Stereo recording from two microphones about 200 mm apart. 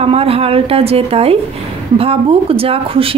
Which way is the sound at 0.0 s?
30° right (ahead or behind).